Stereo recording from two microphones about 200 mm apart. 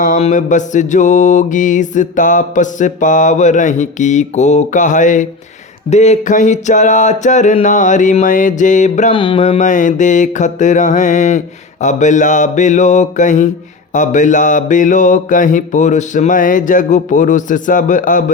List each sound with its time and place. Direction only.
0.0 s mantra: 40° left (ahead or behind)
9.1 s mantra: 25° left (ahead or behind)